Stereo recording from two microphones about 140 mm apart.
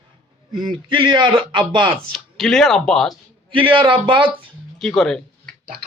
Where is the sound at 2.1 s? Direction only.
Centre (ahead or behind).